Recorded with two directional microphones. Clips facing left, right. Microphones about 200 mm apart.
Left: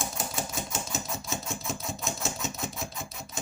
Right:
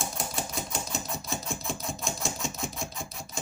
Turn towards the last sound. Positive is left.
turn(degrees=0)  # may be behind; listen again after turning